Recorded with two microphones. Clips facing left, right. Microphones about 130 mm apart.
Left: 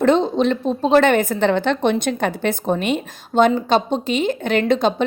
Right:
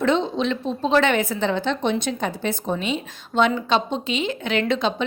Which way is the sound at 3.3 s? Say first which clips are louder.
Left 4 dB; 40° left (ahead or behind).